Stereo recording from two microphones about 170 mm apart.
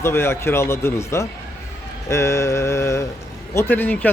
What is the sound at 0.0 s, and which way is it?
Speech, 15° left (ahead or behind).